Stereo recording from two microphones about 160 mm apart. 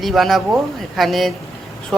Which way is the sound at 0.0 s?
Centre (ahead or behind).